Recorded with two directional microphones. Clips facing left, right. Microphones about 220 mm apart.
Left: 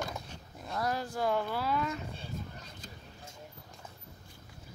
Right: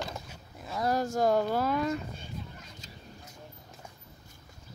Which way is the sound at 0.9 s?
45° right (ahead or behind).